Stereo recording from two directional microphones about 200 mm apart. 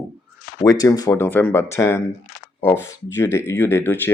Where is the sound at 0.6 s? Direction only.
20° left (ahead or behind).